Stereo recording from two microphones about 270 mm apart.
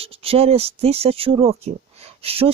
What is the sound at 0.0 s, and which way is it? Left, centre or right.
Speech, right.